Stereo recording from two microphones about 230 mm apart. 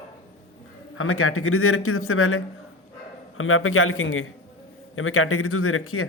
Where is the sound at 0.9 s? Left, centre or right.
Left.